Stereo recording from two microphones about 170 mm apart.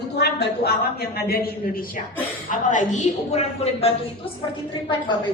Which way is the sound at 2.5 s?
50° left (ahead or behind).